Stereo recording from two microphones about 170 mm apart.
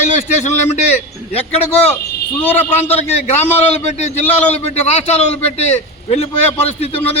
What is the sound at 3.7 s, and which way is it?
A man's voice, 40° left (ahead or behind).